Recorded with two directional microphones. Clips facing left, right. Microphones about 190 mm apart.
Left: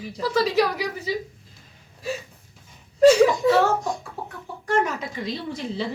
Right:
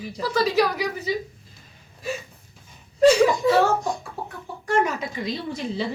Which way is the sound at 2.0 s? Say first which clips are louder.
Even; 35° left (ahead or behind).